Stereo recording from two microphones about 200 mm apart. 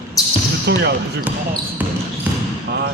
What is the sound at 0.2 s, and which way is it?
Basketball bounce, 15° left (ahead or behind).